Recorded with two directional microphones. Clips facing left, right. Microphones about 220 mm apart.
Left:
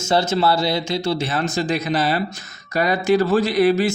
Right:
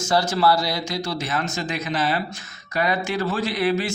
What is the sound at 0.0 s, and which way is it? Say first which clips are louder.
Speech: left 2 dB; 25° left (ahead or behind).